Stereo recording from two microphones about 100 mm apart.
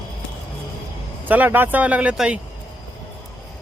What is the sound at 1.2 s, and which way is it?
Speech, 15° right (ahead or behind).